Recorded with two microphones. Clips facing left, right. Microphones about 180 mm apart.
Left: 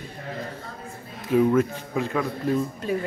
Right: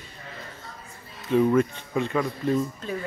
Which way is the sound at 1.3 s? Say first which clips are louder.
Left 1 dB; 5° left (ahead or behind).